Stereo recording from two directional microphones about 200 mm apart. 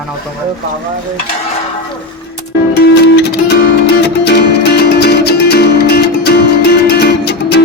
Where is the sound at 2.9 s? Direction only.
55° left (ahead or behind).